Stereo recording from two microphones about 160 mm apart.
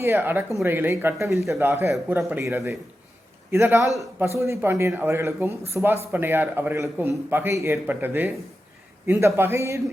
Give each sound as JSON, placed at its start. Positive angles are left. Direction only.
{"t": 0.0, "sound": "a man's voice", "side_deg": -15}